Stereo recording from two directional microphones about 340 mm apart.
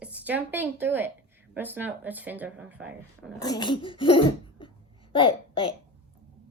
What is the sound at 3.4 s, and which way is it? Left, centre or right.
Speech, centre.